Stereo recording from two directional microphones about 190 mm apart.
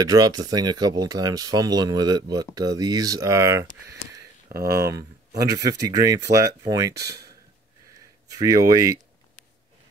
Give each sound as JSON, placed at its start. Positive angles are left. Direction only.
{"t": 0.0, "sound": "speech", "side_deg": -20}
{"t": 4.5, "sound": "speech", "side_deg": -50}
{"t": 4.8, "sound": "speech", "side_deg": -15}
{"t": 7.0, "sound": "speech", "side_deg": -60}
{"t": 8.4, "sound": "speech", "side_deg": -20}